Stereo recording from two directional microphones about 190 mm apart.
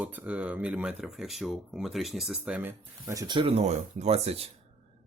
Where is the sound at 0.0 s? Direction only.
10° right (ahead or behind).